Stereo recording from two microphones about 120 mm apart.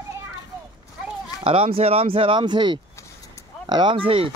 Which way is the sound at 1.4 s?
55° right (ahead or behind).